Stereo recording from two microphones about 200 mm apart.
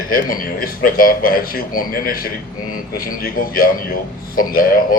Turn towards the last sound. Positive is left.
turn(degrees=45)  # may be behind; listen again after turning